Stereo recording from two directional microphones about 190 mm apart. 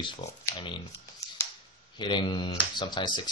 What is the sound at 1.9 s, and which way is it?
Speech, 25° left (ahead or behind).